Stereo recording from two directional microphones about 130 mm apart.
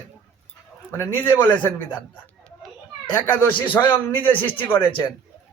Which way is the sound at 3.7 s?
15° left (ahead or behind).